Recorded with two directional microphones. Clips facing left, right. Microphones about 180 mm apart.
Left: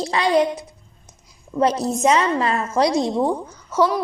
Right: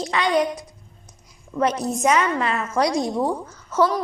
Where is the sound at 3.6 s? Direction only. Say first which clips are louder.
Left 1 dB; 10° left (ahead or behind).